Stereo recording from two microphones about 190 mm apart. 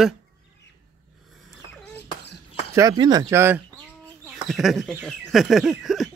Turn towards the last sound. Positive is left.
turn(degrees=0)  # may be behind; listen again after turning